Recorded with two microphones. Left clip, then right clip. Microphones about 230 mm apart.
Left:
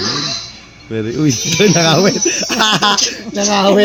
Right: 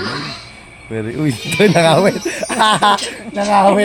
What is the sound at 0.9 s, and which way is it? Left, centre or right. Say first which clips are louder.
Speech: left 4 dB; centre.